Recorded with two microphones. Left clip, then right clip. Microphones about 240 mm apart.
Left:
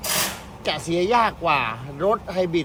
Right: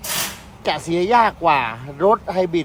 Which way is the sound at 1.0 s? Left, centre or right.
Right.